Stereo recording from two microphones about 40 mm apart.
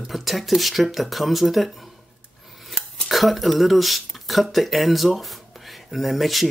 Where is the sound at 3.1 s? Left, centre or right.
Centre.